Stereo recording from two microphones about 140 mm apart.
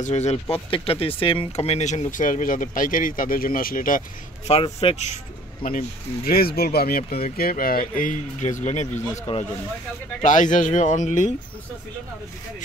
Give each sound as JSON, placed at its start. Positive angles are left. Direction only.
{"t": 0.0, "sound": "speech", "side_deg": 55}
{"t": 4.7, "sound": "speech", "side_deg": 50}
{"t": 5.6, "sound": "speech", "side_deg": 80}
{"t": 10.2, "sound": "speech", "side_deg": 65}